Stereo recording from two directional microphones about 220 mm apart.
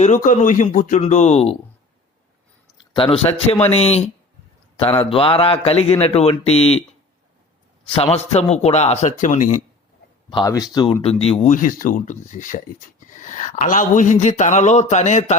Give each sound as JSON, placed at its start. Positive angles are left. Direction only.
{"t": 0.0, "sound": "speech", "side_deg": 35}
{"t": 2.9, "sound": "speech", "side_deg": 25}
{"t": 8.1, "sound": "speech", "side_deg": 30}
{"t": 10.2, "sound": "speech", "side_deg": 20}